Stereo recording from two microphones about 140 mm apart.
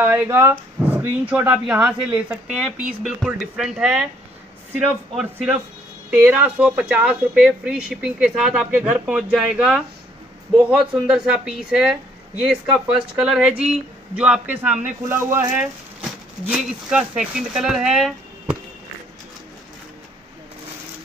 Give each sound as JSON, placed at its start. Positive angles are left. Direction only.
{"t": 0.0, "sound": "speech", "side_deg": -15}